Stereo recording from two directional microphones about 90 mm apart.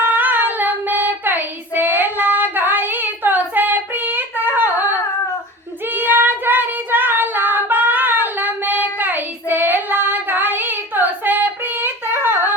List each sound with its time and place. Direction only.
0.0 s child singing: 20° right (ahead or behind)
5.9 s child singing: 20° right (ahead or behind)